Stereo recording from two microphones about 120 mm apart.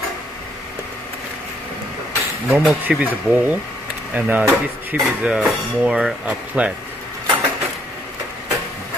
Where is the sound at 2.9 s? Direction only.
15° right (ahead or behind).